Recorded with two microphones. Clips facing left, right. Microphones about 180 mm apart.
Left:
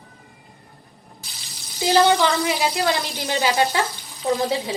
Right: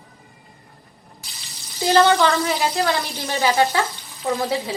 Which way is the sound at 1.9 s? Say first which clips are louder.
Right 1 dB; 15° left (ahead or behind).